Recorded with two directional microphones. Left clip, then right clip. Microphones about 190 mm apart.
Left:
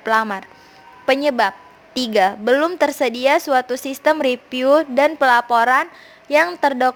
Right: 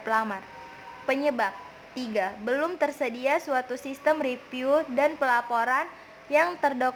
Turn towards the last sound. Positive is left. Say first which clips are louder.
# left 8 dB
turn(degrees=35)  # may be behind; listen again after turning